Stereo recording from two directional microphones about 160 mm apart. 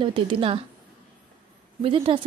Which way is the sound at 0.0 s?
30° right (ahead or behind).